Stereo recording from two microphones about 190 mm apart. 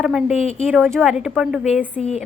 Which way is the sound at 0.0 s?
5° right (ahead or behind).